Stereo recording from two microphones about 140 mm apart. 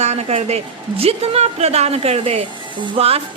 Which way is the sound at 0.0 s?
50° right (ahead or behind).